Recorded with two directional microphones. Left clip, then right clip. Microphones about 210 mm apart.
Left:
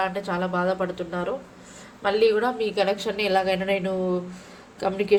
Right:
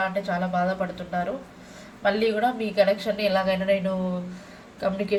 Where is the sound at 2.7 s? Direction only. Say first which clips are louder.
Right 2 dB; 45° left (ahead or behind).